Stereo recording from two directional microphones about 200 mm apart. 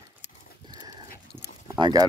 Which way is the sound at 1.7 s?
25° right (ahead or behind).